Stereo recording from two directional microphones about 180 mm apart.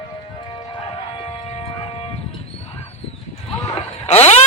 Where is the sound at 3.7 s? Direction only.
35° left (ahead or behind).